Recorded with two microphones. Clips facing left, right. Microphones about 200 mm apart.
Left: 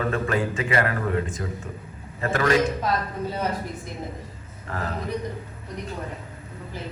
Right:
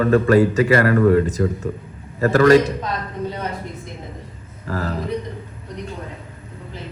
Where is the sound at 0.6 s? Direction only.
55° right (ahead or behind); by 2.7 s 40° right (ahead or behind).